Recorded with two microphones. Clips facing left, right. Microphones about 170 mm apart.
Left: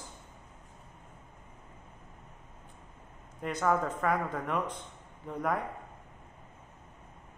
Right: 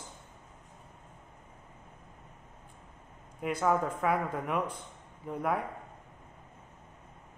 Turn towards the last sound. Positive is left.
turn(degrees=-5)  # may be behind; listen again after turning